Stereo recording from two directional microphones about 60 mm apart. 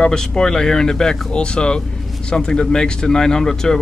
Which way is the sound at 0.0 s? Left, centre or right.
Centre.